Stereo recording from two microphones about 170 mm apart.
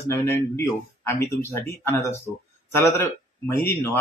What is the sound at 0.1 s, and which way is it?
Speech, 15° left (ahead or behind).